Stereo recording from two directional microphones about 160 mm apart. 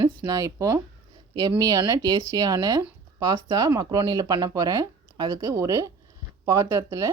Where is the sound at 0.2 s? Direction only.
20° right (ahead or behind).